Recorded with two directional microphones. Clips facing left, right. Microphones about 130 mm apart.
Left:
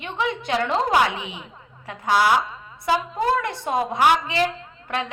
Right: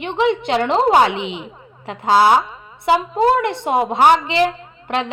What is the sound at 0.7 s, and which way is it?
Speech, 30° right (ahead or behind).